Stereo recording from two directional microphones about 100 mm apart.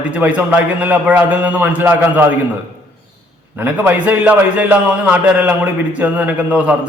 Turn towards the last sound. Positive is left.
turn(degrees=-15)  # may be behind; listen again after turning